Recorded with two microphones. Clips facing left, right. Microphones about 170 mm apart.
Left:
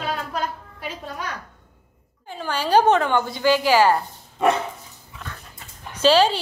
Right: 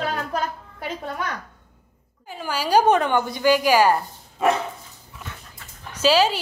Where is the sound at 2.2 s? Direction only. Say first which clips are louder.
Left 1 dB; 10° right (ahead or behind).